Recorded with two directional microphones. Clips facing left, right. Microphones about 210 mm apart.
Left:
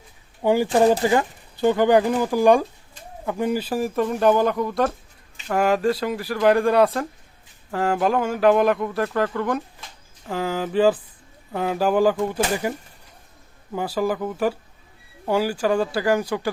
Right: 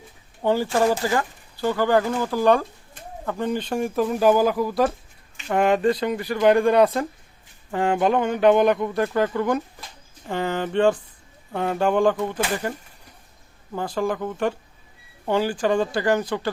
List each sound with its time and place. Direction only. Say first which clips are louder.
0.4 s speech: left 3 dB; 15° left (ahead or behind)